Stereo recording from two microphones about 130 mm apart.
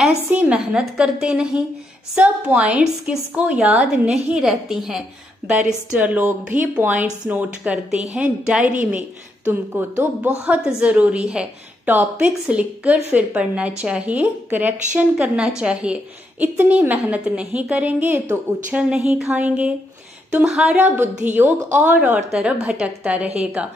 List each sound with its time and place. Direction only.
0.3 s a woman's voice: 10° right (ahead or behind)